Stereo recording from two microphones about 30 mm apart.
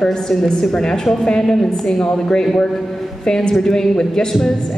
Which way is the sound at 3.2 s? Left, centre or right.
Left.